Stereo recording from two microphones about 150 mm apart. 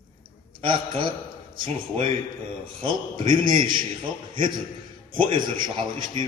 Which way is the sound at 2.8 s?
35° right (ahead or behind).